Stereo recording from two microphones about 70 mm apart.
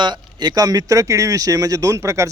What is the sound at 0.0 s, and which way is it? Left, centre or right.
Speech, right.